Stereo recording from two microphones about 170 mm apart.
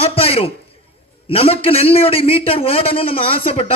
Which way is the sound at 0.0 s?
35° left (ahead or behind).